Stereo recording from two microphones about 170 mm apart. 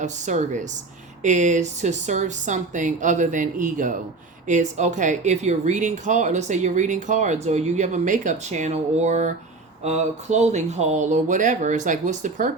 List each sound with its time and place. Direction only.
0.0 s speech: 45° right (ahead or behind)